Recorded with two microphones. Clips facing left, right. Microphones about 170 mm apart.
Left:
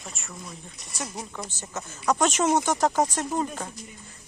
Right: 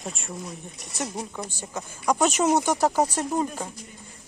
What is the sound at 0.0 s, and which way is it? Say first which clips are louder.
Speech: right 6 dB; 30° right (ahead or behind).